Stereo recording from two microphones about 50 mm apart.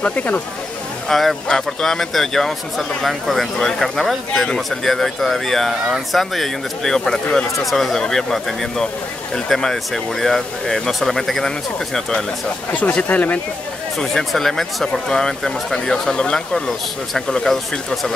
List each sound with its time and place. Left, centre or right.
0.0 s speech: left
1.0 s speech: centre
4.3 s speech: centre
4.6 s speech: centre
12.7 s speech: left
13.9 s speech: centre